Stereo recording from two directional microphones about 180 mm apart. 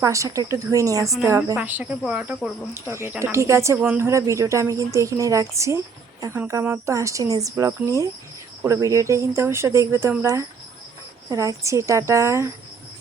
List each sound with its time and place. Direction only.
0.0 s speech: 20° right (ahead or behind)